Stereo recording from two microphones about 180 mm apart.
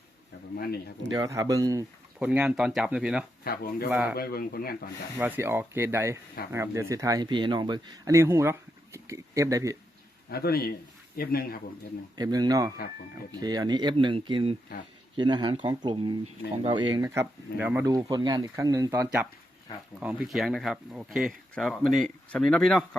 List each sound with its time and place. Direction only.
0.5 s a man's voice: 60° left (ahead or behind)
1.1 s speech: 20° right (ahead or behind)
2.1 s speech: 5° right (ahead or behind)
3.4 s a man's voice: 55° left (ahead or behind)
3.8 s speech: 5° right (ahead or behind)
4.1 s a man's voice: 55° left (ahead or behind)
5.1 s speech: 15° right (ahead or behind)
10.2 s a man's voice: 60° left (ahead or behind)
12.1 s speech: 20° right (ahead or behind)
17.8 s speech: 20° right (ahead or behind); by 23.0 s 5° left (ahead or behind)